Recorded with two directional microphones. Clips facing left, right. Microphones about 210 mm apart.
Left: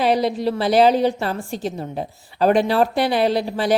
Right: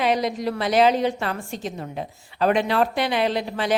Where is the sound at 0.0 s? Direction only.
35° left (ahead or behind).